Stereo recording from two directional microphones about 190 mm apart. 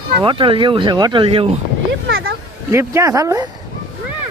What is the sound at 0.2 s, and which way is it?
Speech, 25° right (ahead or behind).